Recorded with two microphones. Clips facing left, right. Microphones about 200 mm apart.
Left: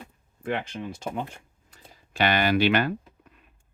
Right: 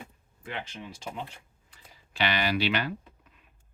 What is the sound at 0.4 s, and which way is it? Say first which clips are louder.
Speech: left 9 dB; 55° left (ahead or behind).